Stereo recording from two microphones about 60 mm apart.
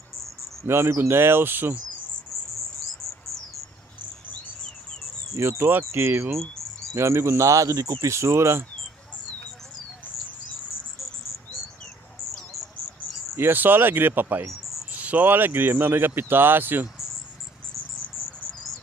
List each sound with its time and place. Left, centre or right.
0.7 s speech: right
5.3 s speech: right
6.3 s cricket: centre
6.9 s speech: right
13.4 s speech: right